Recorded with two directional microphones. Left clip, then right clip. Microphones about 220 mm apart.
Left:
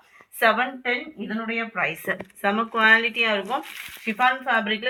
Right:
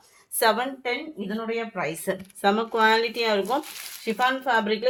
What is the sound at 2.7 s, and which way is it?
Speech, 60° right (ahead or behind).